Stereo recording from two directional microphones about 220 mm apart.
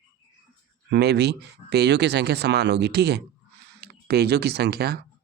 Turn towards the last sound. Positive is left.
turn(degrees=-45)  # may be behind; listen again after turning